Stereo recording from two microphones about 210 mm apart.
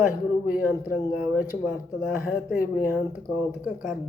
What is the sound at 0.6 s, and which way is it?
Speech, 10° right (ahead or behind).